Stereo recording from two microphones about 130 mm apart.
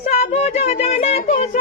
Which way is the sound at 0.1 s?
55° left (ahead or behind).